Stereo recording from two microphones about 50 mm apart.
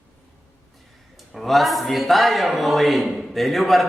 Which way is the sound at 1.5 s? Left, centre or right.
Centre.